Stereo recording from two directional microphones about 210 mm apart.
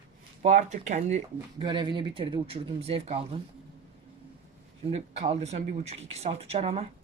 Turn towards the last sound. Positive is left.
turn(degrees=-30)  # may be behind; listen again after turning